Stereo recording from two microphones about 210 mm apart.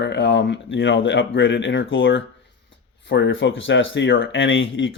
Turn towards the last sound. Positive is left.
turn(degrees=65)  # may be behind; listen again after turning